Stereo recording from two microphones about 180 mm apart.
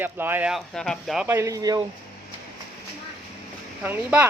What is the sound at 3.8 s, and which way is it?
Speech, 10° right (ahead or behind).